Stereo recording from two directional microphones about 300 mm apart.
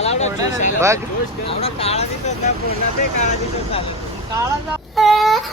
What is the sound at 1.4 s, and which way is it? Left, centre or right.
Speech, centre.